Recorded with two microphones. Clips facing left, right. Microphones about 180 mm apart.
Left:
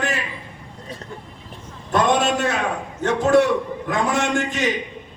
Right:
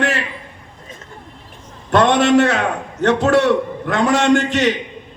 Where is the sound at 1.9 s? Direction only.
75° right (ahead or behind).